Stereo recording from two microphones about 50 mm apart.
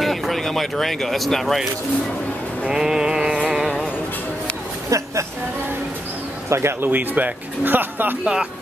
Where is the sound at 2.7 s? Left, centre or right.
Centre.